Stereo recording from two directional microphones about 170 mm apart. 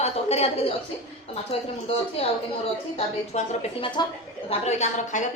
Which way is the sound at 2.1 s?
35° left (ahead or behind).